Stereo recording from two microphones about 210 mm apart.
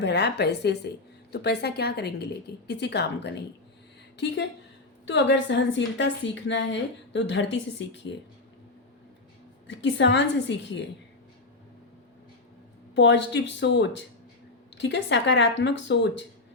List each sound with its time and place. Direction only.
0.0 s a woman's voice: 55° left (ahead or behind)
5.0 s a woman's voice: 60° left (ahead or behind)
9.6 s a woman's voice: 60° left (ahead or behind)
12.9 s a woman's voice: 60° left (ahead or behind)